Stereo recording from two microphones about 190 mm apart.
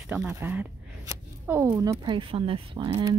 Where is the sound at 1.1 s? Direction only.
15° right (ahead or behind).